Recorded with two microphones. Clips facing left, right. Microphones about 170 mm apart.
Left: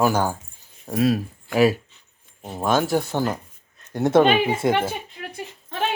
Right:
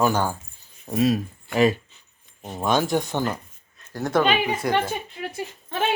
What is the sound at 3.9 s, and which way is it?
Speech, 25° left (ahead or behind).